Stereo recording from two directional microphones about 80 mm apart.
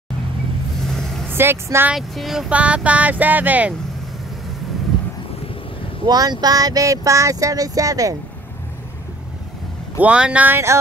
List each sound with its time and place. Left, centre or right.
0.8 s vehicle: centre
1.3 s speech: right
2.0 s speech: centre
2.5 s speech: centre
6.0 s speech: right
9.9 s speech: centre